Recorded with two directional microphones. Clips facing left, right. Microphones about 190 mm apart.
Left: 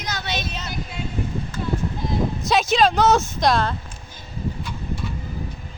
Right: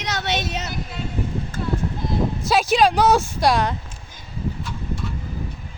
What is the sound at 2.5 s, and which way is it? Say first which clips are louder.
Speech: right 1 dB; 10° right (ahead or behind).